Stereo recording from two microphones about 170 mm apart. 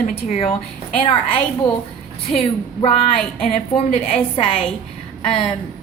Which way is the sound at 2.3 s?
35° left (ahead or behind).